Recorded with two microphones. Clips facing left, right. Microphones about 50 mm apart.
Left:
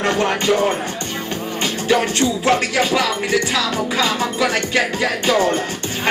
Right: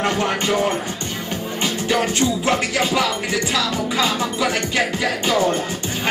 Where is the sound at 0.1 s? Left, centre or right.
Left.